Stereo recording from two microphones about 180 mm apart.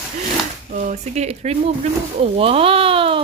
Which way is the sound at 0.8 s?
40° right (ahead or behind).